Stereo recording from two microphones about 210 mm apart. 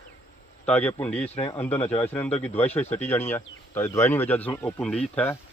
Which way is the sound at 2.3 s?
30° left (ahead or behind).